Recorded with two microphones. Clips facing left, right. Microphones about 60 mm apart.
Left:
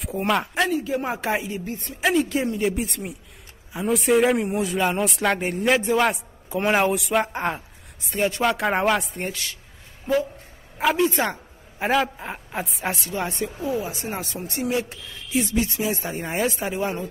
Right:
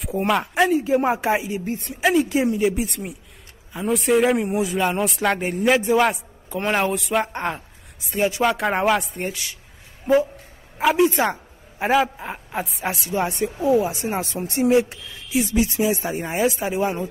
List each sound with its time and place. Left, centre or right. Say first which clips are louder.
0.0 s speech: right 2 dB; centre
0.7 s speech: right 6 dB; right
1.2 s speech: right 3 dB; centre
10.8 s speech: right 3 dB; centre
14.2 s speech: right 6 dB; right
14.7 s speech: right 8 dB; right
15.2 s speech: right 3 dB; centre